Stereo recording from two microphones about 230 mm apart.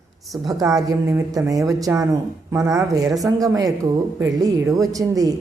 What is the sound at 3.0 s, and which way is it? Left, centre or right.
Speech, centre.